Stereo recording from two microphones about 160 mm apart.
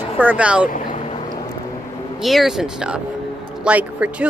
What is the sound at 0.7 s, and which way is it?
Boat, 50° left (ahead or behind).